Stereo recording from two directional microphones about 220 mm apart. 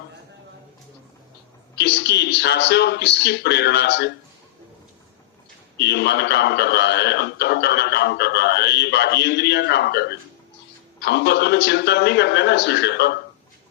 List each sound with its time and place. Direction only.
1.7 s a man's voice: 50° left (ahead or behind)
5.8 s a man's voice: 50° left (ahead or behind)